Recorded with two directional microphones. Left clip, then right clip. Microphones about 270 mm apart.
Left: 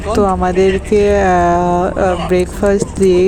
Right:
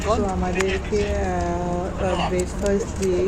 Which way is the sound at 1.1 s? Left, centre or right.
Left.